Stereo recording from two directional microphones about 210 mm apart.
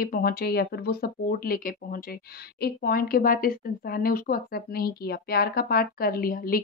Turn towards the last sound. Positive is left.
turn(degrees=45)  # may be behind; listen again after turning